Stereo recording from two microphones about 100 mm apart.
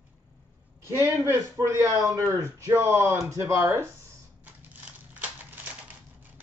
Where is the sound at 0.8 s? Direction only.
25° right (ahead or behind).